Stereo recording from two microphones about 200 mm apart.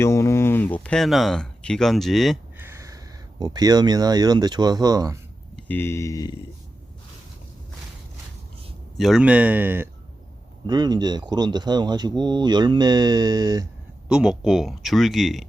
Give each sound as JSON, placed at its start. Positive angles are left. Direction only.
{"t": 0.0, "sound": "speech", "side_deg": 15}
{"t": 2.6, "sound": "speech", "side_deg": -15}
{"t": 5.5, "sound": "speech", "side_deg": 10}
{"t": 9.0, "sound": "speech", "side_deg": 0}
{"t": 10.7, "sound": "speech", "side_deg": -20}
{"t": 14.1, "sound": "speech", "side_deg": -5}